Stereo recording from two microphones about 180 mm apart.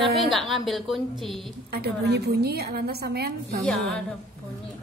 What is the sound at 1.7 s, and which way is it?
A woman's voice, 65° right (ahead or behind).